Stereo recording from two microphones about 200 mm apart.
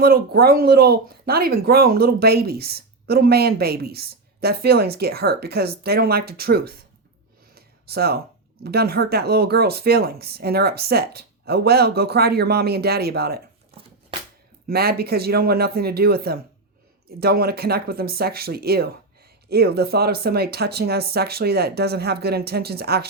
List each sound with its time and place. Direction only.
0.0 s speech: 50° right (ahead or behind)
7.5 s a sound: 50° right (ahead or behind)
8.6 s speech: 50° right (ahead or behind)
14.7 s speech: 50° right (ahead or behind)